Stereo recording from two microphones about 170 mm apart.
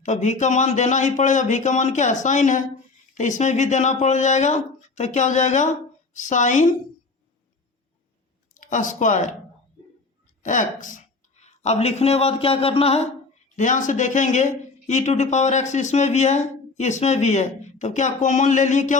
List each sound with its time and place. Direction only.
0.0 s speech: 45° left (ahead or behind)
8.5 s speech: 50° left (ahead or behind)
10.4 s speech: 50° left (ahead or behind)
13.6 s speech: 50° left (ahead or behind)